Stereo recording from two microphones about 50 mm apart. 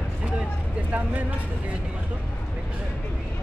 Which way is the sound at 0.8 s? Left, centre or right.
Right.